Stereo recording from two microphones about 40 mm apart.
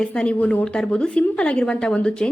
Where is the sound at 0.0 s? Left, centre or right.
Left.